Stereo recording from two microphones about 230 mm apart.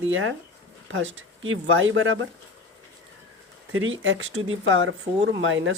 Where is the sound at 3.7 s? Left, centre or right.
Right.